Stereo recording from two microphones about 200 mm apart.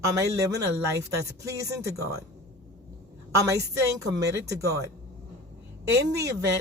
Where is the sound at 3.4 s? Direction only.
15° right (ahead or behind).